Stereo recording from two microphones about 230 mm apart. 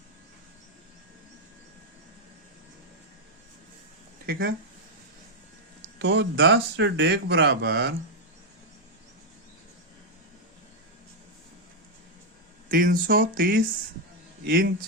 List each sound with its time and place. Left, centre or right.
4.3 s speech: right
6.0 s speech: right
12.7 s speech: right